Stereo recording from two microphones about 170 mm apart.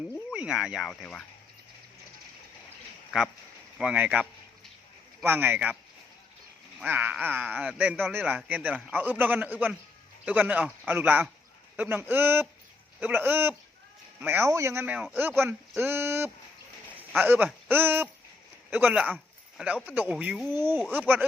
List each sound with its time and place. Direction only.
0.3 s speech: 5° right (ahead or behind)
3.1 s a man's voice: 5° right (ahead or behind)
6.7 s a man's voice: 10° right (ahead or behind)
20.5 s a man's voice: 15° right (ahead or behind)